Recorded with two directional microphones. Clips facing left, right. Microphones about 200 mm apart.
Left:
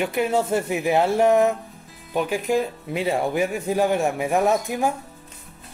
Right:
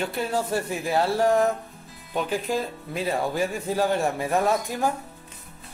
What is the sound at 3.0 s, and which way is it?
A man's voice, 25° left (ahead or behind).